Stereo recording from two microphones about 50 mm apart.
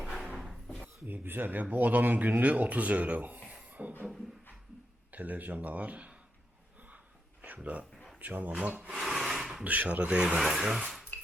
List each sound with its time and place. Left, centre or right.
0.3 s a sound: centre
1.0 s speech: right
3.5 s beatboxing: right
5.1 s speech: right
6.7 s snort: right
7.4 s a sound: right
7.9 s a sound: centre
8.2 s speech: right
9.0 s wood: centre
9.6 s speech: right
10.2 s speech: centre